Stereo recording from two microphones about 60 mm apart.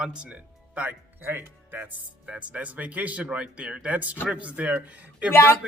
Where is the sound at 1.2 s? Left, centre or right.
Right.